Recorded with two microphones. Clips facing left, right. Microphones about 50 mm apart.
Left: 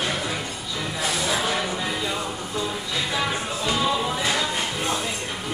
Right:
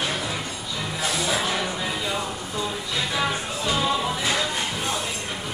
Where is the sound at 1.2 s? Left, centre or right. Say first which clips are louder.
Left 1 dB; centre.